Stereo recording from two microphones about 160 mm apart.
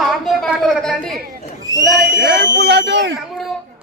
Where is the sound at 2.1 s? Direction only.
90° right.